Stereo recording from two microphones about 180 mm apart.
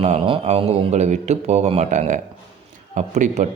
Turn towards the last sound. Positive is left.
turn(degrees=-45)  # may be behind; listen again after turning